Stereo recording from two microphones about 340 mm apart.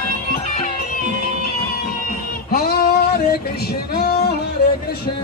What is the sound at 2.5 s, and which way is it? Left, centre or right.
Male singing, left.